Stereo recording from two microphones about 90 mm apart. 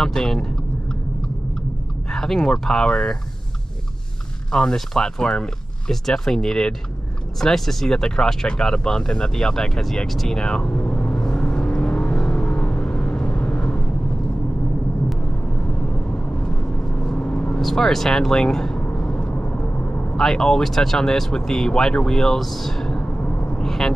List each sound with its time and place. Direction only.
0.0 s speech: 5° left (ahead or behind)
2.0 s speech: 5° left (ahead or behind)
4.5 s speech: 5° left (ahead or behind)
7.3 s a sound: 5° left (ahead or behind)
16.9 s vehicle: 15° left (ahead or behind)
17.6 s speech: 5° left (ahead or behind)
18.9 s vehicle: 10° left (ahead or behind)
20.2 s speech: 5° left (ahead or behind)